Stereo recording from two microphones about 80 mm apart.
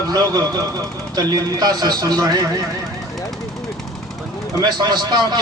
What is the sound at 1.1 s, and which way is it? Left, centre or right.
A man's voice, right.